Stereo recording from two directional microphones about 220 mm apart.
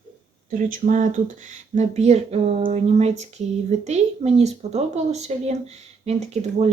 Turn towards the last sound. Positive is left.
turn(degrees=-30)  # may be behind; listen again after turning